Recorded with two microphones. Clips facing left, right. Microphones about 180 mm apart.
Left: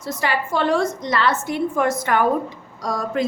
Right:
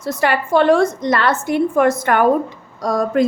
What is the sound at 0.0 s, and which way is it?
A woman's voice, 55° right (ahead or behind).